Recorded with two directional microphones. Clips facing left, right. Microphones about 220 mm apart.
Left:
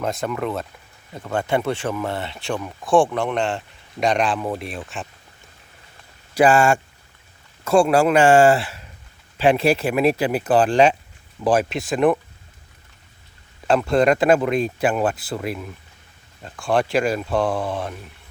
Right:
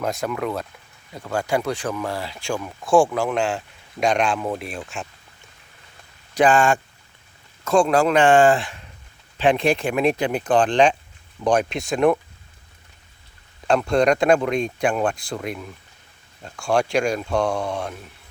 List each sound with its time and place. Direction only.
0.0 s speech: centre (ahead or behind)
6.3 s speech: 10° left (ahead or behind)
13.7 s speech: 5° left (ahead or behind)